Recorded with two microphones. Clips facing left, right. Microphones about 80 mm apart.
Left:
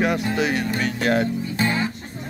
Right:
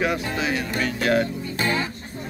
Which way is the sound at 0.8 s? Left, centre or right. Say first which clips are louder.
Right 1 dB; left.